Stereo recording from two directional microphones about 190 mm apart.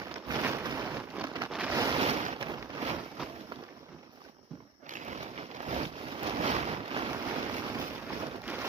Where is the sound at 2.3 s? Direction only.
25° right (ahead or behind).